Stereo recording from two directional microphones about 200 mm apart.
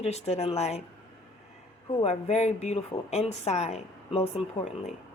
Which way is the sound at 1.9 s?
30° left (ahead or behind).